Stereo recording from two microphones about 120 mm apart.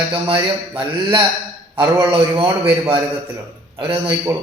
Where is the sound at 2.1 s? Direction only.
50° right (ahead or behind).